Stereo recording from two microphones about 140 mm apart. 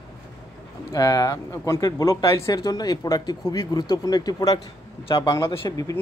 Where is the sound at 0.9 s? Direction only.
25° left (ahead or behind).